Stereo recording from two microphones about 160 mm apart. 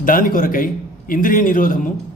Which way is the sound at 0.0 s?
60° left (ahead or behind).